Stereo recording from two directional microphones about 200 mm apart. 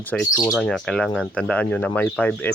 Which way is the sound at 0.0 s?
5° left (ahead or behind).